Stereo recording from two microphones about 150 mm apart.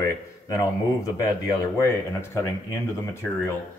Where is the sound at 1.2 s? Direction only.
20° left (ahead or behind).